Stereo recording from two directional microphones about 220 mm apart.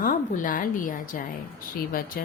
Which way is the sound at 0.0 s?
40° left (ahead or behind).